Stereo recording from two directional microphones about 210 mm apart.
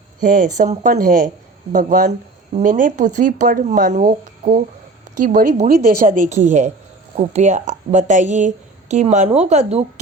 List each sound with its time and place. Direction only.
0.2 s a woman's voice: 35° right (ahead or behind)